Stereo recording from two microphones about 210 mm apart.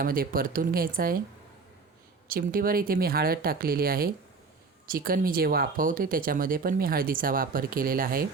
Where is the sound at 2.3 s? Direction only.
45° right (ahead or behind).